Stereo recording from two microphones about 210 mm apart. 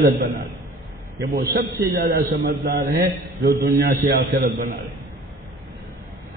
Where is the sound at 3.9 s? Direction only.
40° right (ahead or behind).